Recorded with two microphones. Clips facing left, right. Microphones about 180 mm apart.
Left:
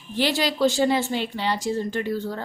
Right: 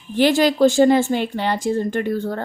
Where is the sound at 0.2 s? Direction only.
50° right (ahead or behind).